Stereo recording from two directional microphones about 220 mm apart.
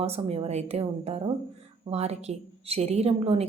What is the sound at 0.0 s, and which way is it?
A woman's voice, 25° right (ahead or behind).